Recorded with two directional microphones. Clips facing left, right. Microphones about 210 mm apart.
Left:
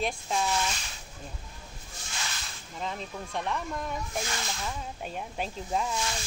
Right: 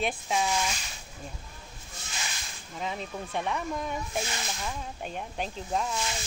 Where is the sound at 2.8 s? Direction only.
5° right (ahead or behind).